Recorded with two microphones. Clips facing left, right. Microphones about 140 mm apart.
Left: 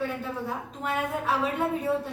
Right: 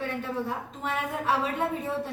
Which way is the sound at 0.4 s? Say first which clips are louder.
Left 1 dB; centre (ahead or behind).